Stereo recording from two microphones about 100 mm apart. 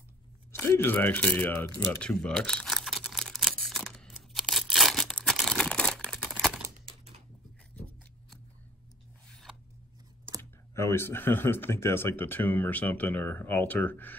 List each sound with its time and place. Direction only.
0.5 s a sound: 25° left (ahead or behind); by 6.5 s 5° left (ahead or behind)
9.3 s zipper: 5° left (ahead or behind)
10.7 s speech: 30° left (ahead or behind)